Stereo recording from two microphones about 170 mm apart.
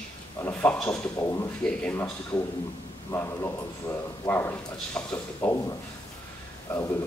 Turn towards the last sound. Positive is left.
turn(degrees=10)  # may be behind; listen again after turning